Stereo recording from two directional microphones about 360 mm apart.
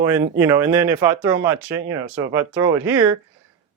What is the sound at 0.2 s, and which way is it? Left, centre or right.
Speech, centre.